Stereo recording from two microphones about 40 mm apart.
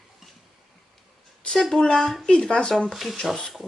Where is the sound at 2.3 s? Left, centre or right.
Left.